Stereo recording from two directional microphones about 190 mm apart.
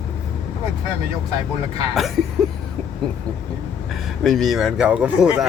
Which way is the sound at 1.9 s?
Centre (ahead or behind).